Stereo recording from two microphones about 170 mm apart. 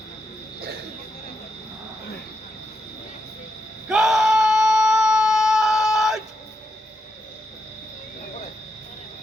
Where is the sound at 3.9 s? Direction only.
Centre (ahead or behind).